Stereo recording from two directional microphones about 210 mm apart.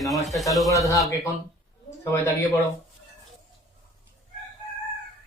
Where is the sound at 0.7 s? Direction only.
15° left (ahead or behind).